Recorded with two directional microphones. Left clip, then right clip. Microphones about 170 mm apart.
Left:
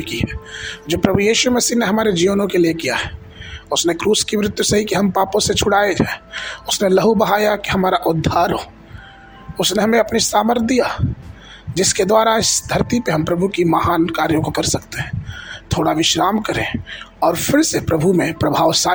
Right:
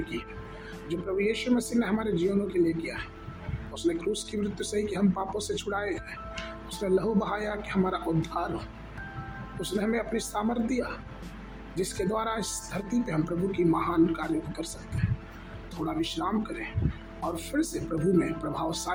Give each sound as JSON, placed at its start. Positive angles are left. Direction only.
{"t": 0.9, "sound": "speech", "side_deg": 60}
{"t": 9.6, "sound": "speech", "side_deg": 60}
{"t": 15.8, "sound": "speech", "side_deg": 60}